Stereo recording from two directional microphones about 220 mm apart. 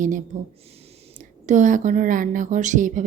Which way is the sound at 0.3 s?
35° right (ahead or behind).